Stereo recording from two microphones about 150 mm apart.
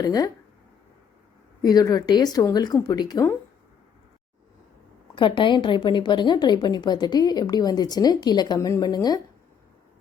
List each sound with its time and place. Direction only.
0.0 s a woman's voice: 25° left (ahead or behind)
1.6 s a woman's voice: 25° left (ahead or behind)
5.1 s a woman's voice: 35° left (ahead or behind)